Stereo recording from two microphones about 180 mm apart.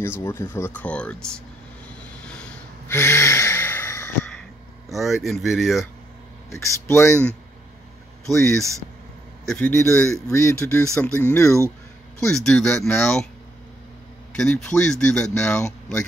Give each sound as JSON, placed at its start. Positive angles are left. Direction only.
{"t": 0.0, "sound": "speech", "side_deg": 15}
{"t": 2.9, "sound": "gasp", "side_deg": 15}
{"t": 4.8, "sound": "speech", "side_deg": 0}
{"t": 6.5, "sound": "speech", "side_deg": 15}
{"t": 8.3, "sound": "speech", "side_deg": 0}
{"t": 9.5, "sound": "speech", "side_deg": 10}
{"t": 12.2, "sound": "speech", "side_deg": 5}
{"t": 14.3, "sound": "speech", "side_deg": 5}